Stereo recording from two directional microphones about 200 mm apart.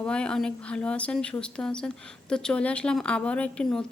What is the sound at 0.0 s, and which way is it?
A woman's voice, 5° left (ahead or behind).